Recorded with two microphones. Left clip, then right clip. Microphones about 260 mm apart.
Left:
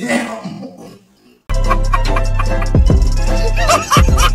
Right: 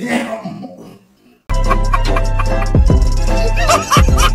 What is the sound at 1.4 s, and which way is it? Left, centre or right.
Music, centre.